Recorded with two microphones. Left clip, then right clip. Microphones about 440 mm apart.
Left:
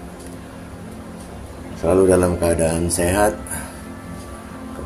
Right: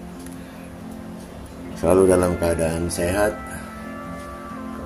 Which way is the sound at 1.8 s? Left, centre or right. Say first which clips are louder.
Left 1 dB; right.